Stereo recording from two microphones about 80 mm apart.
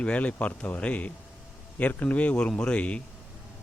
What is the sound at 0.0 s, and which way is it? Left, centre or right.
A man's voice, centre.